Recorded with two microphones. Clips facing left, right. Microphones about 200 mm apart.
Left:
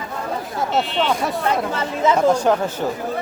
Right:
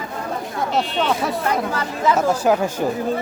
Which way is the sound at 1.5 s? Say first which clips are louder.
Left 1 dB; 25° left (ahead or behind).